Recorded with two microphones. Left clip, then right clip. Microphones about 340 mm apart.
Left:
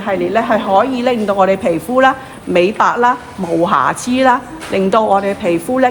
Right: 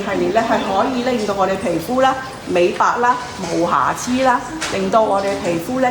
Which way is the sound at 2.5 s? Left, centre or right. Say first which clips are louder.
Left 3 dB; left.